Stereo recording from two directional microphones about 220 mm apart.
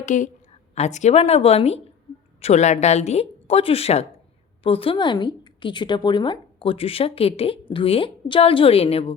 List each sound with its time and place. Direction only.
0.0 s a woman's voice: 35° left (ahead or behind)